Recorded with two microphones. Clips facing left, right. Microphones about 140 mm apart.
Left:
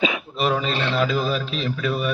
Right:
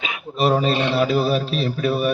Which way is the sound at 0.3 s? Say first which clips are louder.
Right 7 dB; 40° right (ahead or behind).